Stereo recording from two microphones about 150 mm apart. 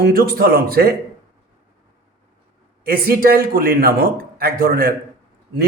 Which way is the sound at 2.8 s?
80° right.